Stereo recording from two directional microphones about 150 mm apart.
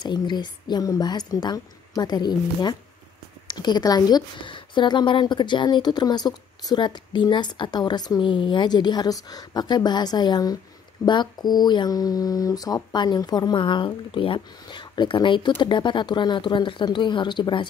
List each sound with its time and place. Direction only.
0.0 s a woman's voice: 30° left (ahead or behind)